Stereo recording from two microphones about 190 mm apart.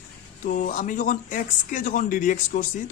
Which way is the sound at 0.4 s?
45° left (ahead or behind).